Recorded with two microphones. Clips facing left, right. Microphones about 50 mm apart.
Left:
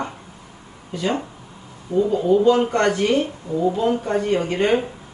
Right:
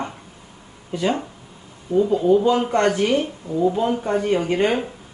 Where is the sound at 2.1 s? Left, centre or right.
Centre.